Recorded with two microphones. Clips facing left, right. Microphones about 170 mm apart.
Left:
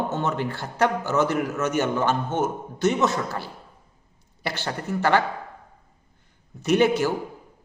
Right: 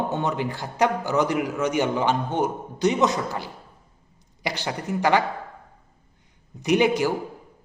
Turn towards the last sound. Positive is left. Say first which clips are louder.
# even
turn(degrees=-15)  # may be behind; listen again after turning